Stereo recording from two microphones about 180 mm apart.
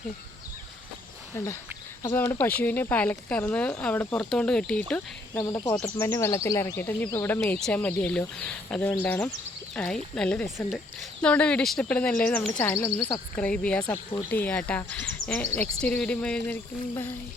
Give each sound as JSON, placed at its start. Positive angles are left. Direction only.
{"t": 2.1, "sound": "speech", "side_deg": 20}
{"t": 2.4, "sound": "speech", "side_deg": 10}
{"t": 5.4, "sound": "speech", "side_deg": 20}